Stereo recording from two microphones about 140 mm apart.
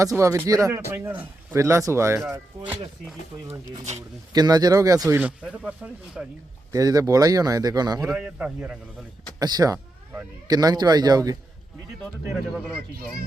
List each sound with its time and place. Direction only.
0.0 s speech: 25° right (ahead or behind)
3.4 s speech: 20° right (ahead or behind)
6.7 s speech: 25° right (ahead or behind)
8.0 s a man's voice: 5° right (ahead or behind)
9.4 s speech: 25° right (ahead or behind)